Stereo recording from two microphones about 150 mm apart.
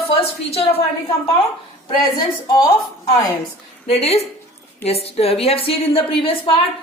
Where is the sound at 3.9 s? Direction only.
45° left (ahead or behind).